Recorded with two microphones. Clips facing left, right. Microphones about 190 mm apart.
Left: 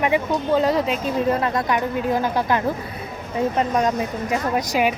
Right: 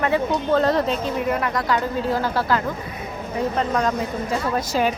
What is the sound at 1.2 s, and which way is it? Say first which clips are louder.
A woman's voice: left 3 dB; 30° left (ahead or behind).